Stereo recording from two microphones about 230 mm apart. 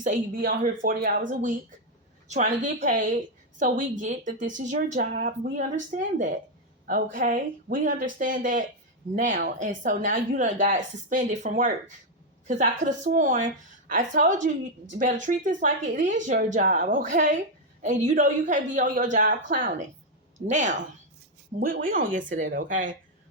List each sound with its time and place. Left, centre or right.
0.0 s a woman's voice: right